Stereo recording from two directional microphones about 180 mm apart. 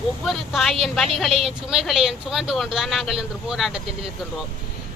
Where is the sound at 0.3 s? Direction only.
Centre (ahead or behind).